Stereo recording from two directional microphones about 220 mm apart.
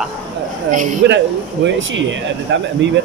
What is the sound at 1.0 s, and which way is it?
Speech, 55° right (ahead or behind).